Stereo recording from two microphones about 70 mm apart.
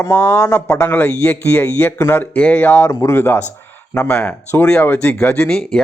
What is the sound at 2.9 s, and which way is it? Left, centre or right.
Speech, left.